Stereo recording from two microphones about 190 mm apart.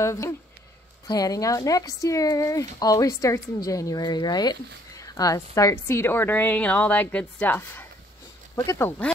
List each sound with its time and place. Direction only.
0.0 s a woman's voice: 15° left (ahead or behind)